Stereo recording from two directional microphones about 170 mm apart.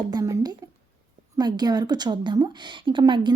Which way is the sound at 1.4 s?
25° right (ahead or behind).